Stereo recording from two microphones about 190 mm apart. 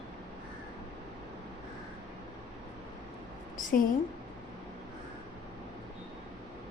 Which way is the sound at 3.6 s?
45° left (ahead or behind).